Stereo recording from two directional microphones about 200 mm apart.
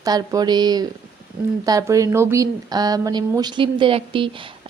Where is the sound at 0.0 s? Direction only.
20° right (ahead or behind).